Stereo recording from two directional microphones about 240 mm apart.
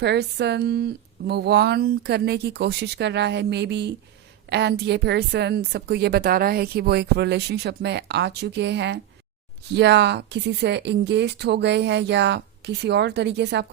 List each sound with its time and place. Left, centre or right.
0.0 s a woman's voice: right